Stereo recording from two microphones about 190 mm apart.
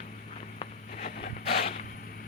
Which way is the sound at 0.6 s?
30° left (ahead or behind).